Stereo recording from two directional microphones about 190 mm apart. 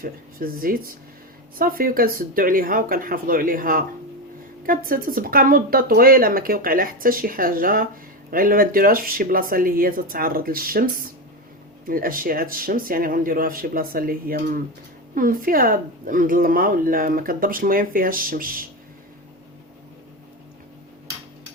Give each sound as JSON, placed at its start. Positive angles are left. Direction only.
{"t": 0.0, "sound": "speech", "side_deg": -50}